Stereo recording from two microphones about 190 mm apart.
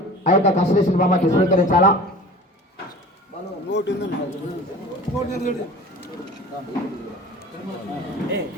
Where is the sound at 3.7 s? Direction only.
65° left (ahead or behind).